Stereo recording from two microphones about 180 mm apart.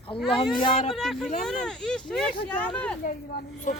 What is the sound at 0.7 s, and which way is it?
Speech, 40° left (ahead or behind).